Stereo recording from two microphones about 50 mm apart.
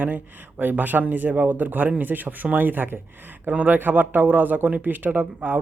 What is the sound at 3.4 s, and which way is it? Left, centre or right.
Speech, right.